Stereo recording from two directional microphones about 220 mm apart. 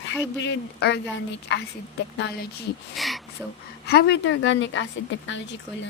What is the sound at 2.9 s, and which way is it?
Speech, centre (ahead or behind).